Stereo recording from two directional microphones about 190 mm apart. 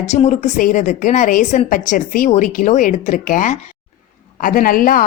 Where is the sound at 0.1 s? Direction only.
35° left (ahead or behind).